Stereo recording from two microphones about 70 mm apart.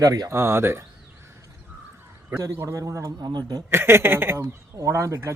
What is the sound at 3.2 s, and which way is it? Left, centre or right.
Speech, right.